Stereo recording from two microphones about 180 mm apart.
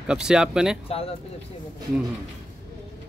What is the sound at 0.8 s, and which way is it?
Speech, 30° left (ahead or behind).